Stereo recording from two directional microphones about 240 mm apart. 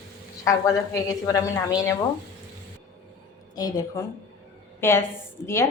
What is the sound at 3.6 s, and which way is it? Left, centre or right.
A woman's voice, centre.